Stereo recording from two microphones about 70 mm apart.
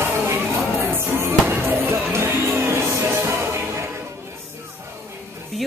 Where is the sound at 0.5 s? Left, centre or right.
Right.